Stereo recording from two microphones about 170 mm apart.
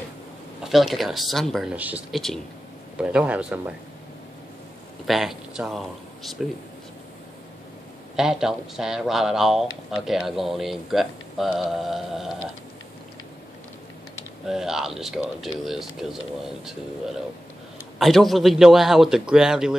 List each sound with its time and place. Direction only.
0.7 s a man's voice: centre (ahead or behind)
5.0 s speech: centre (ahead or behind)
8.2 s speech: 5° right (ahead or behind)
14.4 s speech: centre (ahead or behind)
17.9 s speech: centre (ahead or behind)